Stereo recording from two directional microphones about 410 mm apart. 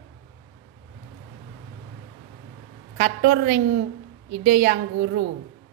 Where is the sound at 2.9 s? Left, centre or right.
Right.